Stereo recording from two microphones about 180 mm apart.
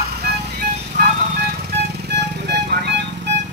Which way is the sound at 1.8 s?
65° right (ahead or behind).